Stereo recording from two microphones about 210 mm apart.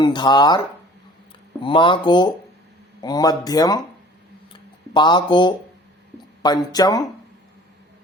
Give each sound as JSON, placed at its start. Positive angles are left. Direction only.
{"t": 0.0, "sound": "speech", "side_deg": 20}
{"t": 1.6, "sound": "speech", "side_deg": 25}
{"t": 4.9, "sound": "speech", "side_deg": 20}